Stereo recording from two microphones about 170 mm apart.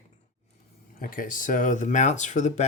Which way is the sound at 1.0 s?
55° left (ahead or behind).